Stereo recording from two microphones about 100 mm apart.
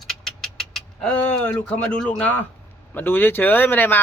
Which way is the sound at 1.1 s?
15° left (ahead or behind).